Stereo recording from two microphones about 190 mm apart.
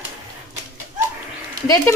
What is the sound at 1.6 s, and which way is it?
Speech, 20° left (ahead or behind).